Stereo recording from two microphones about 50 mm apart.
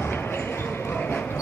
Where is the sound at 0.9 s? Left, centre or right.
Left.